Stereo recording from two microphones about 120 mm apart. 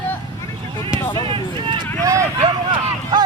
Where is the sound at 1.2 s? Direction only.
45° right (ahead or behind).